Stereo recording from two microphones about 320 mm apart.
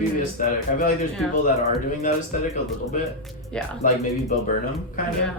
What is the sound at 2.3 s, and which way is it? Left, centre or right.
Speech, left.